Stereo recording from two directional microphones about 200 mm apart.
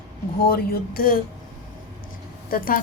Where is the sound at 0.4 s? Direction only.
50° left (ahead or behind).